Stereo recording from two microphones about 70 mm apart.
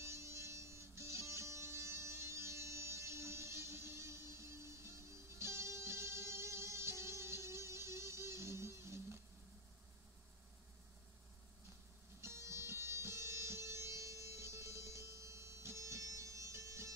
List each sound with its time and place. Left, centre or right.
0.0 s music: right
12.2 s music: right